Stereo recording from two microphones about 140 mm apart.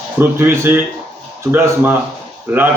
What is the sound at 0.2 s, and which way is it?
A man's voice, 15° right (ahead or behind).